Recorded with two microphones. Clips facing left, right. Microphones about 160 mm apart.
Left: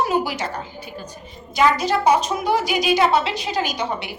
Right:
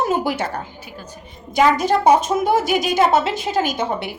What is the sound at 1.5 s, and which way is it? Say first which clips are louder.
A woman's voice: right 2 dB; 50° right (ahead or behind).